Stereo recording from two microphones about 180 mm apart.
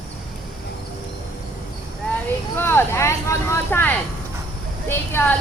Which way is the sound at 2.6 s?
15° left (ahead or behind).